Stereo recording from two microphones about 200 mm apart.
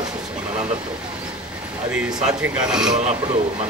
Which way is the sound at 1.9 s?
5° right (ahead or behind).